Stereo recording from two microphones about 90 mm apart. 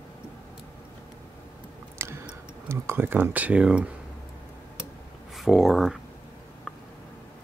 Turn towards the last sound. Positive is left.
turn(degrees=0)  # may be behind; listen again after turning